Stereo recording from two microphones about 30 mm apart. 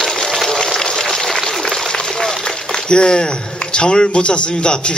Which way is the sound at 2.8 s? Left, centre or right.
Left.